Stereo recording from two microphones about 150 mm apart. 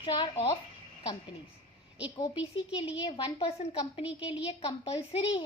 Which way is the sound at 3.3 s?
40° left (ahead or behind).